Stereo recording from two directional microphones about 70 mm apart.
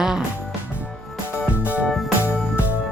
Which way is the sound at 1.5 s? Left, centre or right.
Right.